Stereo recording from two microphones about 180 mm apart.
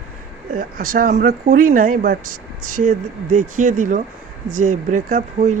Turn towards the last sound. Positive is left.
turn(degrees=-45)  # may be behind; listen again after turning